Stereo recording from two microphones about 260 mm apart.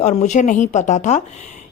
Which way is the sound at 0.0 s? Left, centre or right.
Left.